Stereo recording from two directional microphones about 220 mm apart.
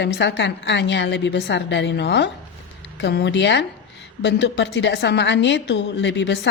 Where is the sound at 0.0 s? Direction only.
50° left (ahead or behind).